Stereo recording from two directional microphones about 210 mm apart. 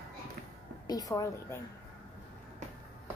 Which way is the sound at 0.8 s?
15° left (ahead or behind).